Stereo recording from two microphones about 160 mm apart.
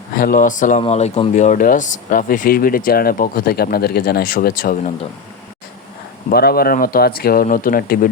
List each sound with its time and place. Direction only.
0.2 s speech: 60° left (ahead or behind)
0.8 s speech: 40° left (ahead or behind); by 4.8 s 65° left (ahead or behind)
6.3 s speech: 75° left (ahead or behind)